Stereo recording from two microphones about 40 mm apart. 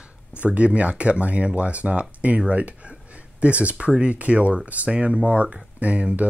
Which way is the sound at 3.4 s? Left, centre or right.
Right.